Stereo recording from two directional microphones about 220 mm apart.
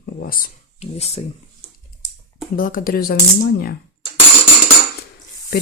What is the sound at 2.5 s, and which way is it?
Speech, 40° left (ahead or behind).